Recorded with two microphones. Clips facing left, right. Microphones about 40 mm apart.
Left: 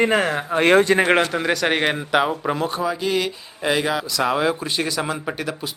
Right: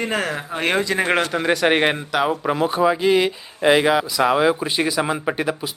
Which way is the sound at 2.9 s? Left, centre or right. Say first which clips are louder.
Right 6 dB; right.